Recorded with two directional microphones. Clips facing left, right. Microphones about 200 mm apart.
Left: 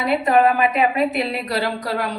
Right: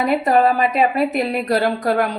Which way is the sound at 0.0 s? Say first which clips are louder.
Right 1 dB; 45° right (ahead or behind).